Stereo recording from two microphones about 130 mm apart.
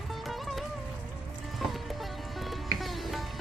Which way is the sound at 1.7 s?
Centre (ahead or behind).